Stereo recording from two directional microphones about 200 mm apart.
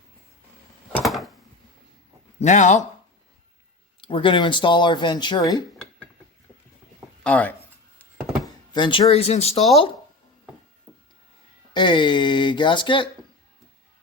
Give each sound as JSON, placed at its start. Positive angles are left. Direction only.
{"t": 0.9, "sound": "a sound", "side_deg": 0}
{"t": 2.4, "sound": "speech", "side_deg": 35}
{"t": 4.0, "sound": "speech", "side_deg": 25}
{"t": 7.3, "sound": "speech", "side_deg": 5}
{"t": 8.7, "sound": "speech", "side_deg": 25}
{"t": 11.7, "sound": "speech", "side_deg": 25}